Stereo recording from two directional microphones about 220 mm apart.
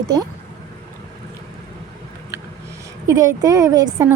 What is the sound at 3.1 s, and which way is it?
A woman's voice, 15° right (ahead or behind).